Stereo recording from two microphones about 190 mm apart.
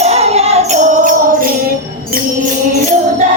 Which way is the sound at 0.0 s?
35° right (ahead or behind).